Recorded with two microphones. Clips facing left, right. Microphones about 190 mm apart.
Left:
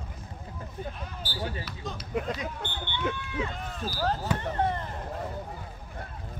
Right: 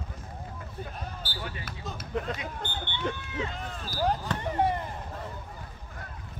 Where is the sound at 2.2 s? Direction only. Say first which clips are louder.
Left 1 dB; 10° left (ahead or behind).